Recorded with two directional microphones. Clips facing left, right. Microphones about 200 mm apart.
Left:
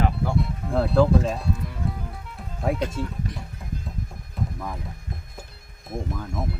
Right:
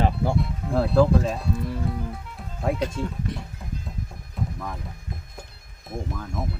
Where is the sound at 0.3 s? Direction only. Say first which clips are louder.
Even; centre (ahead or behind).